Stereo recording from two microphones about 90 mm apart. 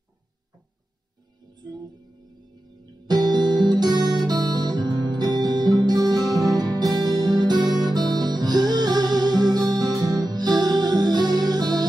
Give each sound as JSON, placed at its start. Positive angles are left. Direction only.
{"t": 1.5, "sound": "music", "side_deg": -50}
{"t": 3.1, "sound": "guitar", "side_deg": -50}